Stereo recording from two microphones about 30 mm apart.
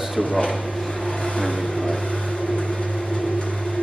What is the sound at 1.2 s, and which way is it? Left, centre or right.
Vehicle, left.